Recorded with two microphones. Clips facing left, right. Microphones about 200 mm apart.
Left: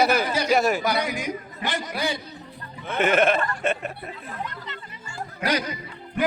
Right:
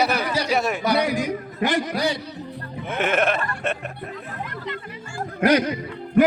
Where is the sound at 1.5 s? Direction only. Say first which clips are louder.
Right 12 dB; 60° right (ahead or behind).